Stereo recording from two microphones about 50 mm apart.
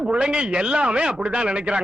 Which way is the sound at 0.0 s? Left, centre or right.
Centre.